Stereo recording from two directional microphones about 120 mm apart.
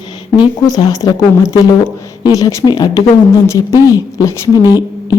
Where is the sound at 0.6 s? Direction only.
30° left (ahead or behind).